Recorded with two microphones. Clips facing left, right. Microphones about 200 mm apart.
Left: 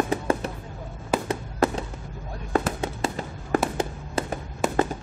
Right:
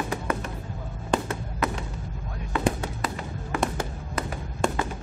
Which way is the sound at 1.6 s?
30° left (ahead or behind).